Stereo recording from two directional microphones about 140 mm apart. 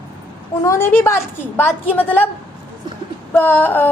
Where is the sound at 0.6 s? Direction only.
20° left (ahead or behind).